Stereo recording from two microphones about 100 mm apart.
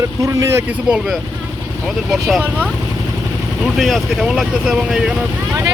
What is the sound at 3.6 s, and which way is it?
Speech, centre (ahead or behind).